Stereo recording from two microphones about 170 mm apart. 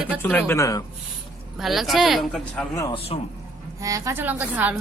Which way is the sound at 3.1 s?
35° left (ahead or behind).